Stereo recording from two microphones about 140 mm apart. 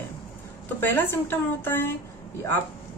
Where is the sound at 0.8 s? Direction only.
15° left (ahead or behind).